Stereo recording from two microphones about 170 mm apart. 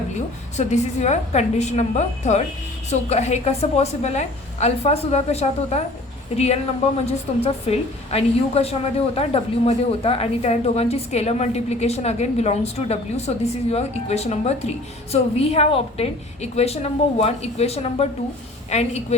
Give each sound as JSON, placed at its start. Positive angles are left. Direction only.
{"t": 0.1, "sound": "a woman's voice", "side_deg": 40}